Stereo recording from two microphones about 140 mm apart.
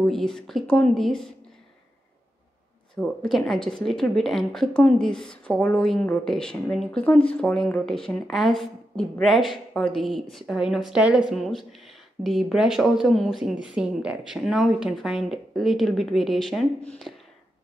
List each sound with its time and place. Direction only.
0.0 s a woman's voice: 5° left (ahead or behind)
3.0 s a woman's voice: 5° left (ahead or behind)